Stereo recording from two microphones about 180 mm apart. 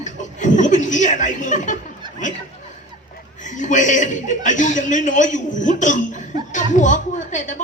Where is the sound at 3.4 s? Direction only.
45° left (ahead or behind).